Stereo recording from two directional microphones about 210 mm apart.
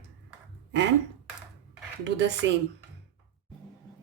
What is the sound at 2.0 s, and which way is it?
Speech, 55° right (ahead or behind).